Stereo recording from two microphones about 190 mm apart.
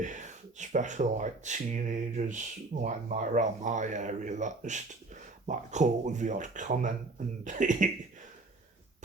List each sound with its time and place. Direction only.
0.0 s speech: 40° right (ahead or behind)